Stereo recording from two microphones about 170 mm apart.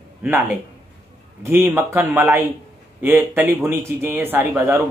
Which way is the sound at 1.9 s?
10° right (ahead or behind).